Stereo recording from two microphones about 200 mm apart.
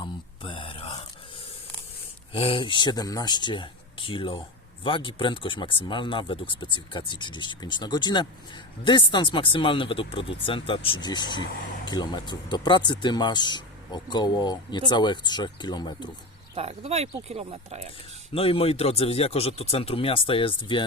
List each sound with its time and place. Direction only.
0.0 s a sound: 25° left (ahead or behind)
2.3 s speech: 25° left (ahead or behind)
16.6 s speech: 30° right (ahead or behind)
18.3 s speech: 30° left (ahead or behind)